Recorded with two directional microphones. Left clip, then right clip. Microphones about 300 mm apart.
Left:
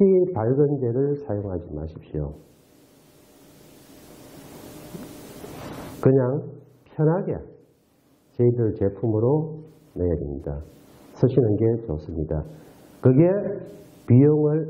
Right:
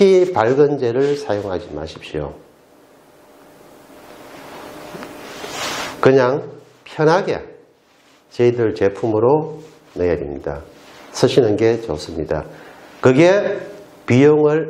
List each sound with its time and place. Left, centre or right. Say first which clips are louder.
0.3 s speech: right 8 dB; centre
4.6 s a sound: right 8 dB; centre
8.5 s a man's voice: right 7 dB; centre